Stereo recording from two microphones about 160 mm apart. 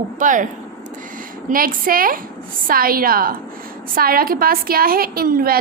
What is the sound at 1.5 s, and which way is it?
Child singing, 60° right (ahead or behind).